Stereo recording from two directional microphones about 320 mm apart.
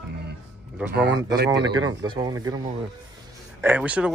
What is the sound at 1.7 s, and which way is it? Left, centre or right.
Speech, centre.